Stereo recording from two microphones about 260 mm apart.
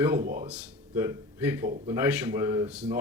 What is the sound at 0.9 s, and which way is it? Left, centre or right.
Speech, centre.